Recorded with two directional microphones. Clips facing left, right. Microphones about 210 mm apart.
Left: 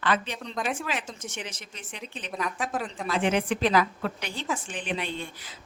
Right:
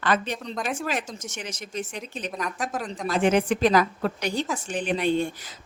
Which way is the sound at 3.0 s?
45° right (ahead or behind).